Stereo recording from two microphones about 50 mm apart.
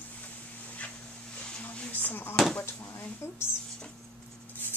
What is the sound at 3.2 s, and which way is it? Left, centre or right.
Speech, left.